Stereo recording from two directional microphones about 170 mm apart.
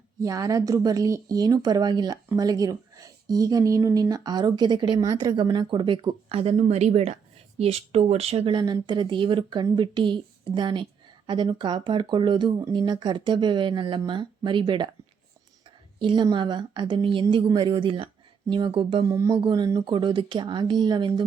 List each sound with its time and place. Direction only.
0.2 s speech: 20° right (ahead or behind)
16.0 s speech: 25° right (ahead or behind)
19.0 s speech: 20° right (ahead or behind)